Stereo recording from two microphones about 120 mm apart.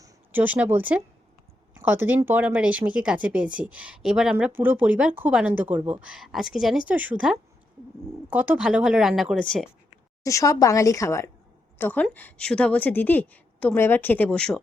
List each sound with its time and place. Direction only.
0.3 s speech: 15° right (ahead or behind); by 9.6 s centre (ahead or behind)
10.2 s a woman's voice: 30° left (ahead or behind)
11.8 s a woman's voice: 15° left (ahead or behind)